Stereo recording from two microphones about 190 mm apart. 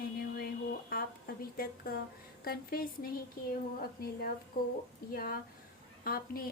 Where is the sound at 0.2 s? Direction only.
55° left (ahead or behind).